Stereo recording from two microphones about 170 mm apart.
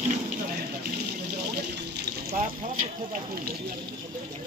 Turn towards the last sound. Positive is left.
turn(degrees=-55)  # may be behind; listen again after turning